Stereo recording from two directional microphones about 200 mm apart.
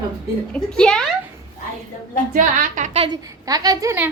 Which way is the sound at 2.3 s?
40° right (ahead or behind).